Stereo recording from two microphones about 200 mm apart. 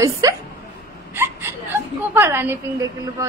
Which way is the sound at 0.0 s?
15° right (ahead or behind).